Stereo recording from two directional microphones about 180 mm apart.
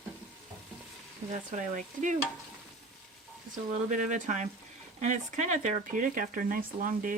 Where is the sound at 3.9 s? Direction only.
45° right (ahead or behind).